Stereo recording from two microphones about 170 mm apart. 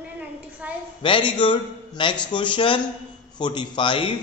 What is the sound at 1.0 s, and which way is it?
A man's voice, 30° left (ahead or behind).